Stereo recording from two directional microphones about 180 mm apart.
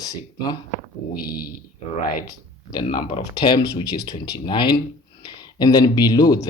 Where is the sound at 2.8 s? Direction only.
35° left (ahead or behind).